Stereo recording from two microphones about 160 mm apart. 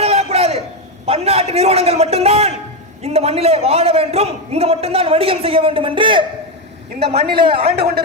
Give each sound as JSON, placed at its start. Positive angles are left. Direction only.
{"t": 0.0, "sound": "a sound", "side_deg": -40}
{"t": 1.0, "sound": "a man's voice", "side_deg": -40}
{"t": 7.0, "sound": "a woman's voice", "side_deg": -90}